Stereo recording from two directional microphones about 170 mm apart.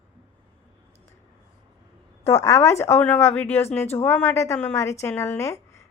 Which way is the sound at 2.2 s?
15° left (ahead or behind).